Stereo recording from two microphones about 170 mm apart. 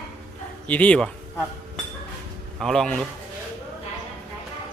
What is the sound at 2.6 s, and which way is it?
Speech, 5° left (ahead or behind).